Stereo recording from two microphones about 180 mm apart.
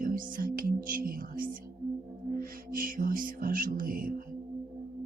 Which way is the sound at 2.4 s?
50° right (ahead or behind).